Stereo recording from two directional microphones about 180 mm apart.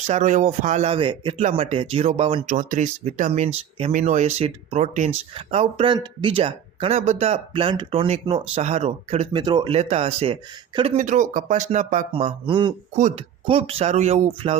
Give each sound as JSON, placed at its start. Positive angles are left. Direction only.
{"t": 0.1, "sound": "speech", "side_deg": -40}
{"t": 12.5, "sound": "speech", "side_deg": -25}